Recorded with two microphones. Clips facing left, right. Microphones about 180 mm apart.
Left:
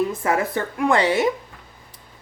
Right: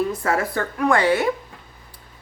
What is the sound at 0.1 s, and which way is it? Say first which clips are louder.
Speech: left 1 dB; 20° left (ahead or behind).